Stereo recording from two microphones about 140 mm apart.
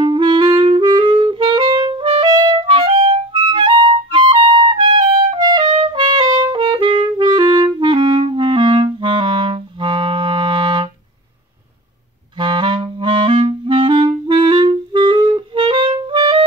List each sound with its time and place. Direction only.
0.0 s music: 35° right (ahead or behind)
3.3 s music: 35° right (ahead or behind)
12.4 s clarinet: 35° right (ahead or behind)